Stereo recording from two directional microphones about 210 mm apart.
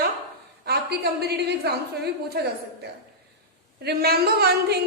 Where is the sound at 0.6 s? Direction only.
50° right (ahead or behind).